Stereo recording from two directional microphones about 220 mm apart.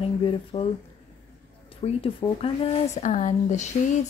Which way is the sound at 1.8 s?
25° left (ahead or behind).